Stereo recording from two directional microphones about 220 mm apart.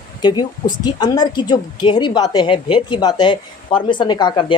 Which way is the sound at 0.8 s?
20° left (ahead or behind).